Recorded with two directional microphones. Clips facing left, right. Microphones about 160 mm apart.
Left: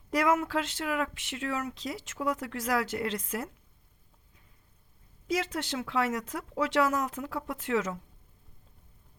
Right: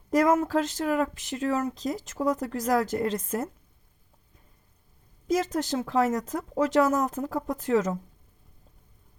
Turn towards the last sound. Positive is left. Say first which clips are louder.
# right 5 dB
turn(degrees=-40)  # may be behind; listen again after turning